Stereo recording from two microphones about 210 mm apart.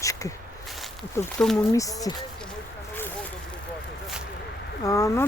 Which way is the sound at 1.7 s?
15° left (ahead or behind).